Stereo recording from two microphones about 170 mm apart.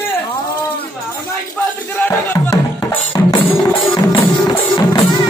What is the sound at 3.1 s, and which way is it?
Music, 25° left (ahead or behind).